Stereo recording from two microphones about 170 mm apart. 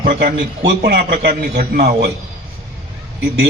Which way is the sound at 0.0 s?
55° right (ahead or behind).